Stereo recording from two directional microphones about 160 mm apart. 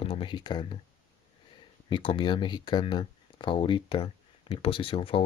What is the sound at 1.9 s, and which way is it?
Speech, 30° left (ahead or behind).